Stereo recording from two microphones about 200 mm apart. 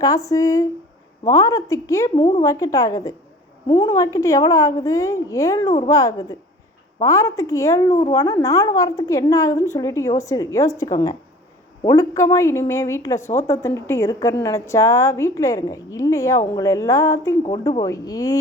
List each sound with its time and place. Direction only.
0.0 s a woman's voice: 15° left (ahead or behind)